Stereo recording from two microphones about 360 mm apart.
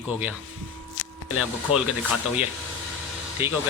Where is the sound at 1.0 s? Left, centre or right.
Left.